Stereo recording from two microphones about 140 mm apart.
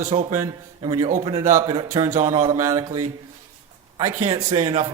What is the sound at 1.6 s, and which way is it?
Speech, 45° right (ahead or behind).